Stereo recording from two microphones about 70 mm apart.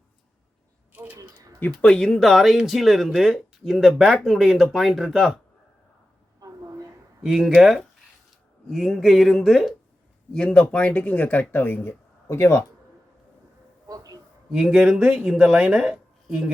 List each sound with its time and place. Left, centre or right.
1.5 s speech: left
1.9 s speech: centre
6.4 s a sound: right
7.2 s speech: centre; by 11.9 s left
11.9 s speech: left
13.8 s a sound: right
14.5 s speech: centre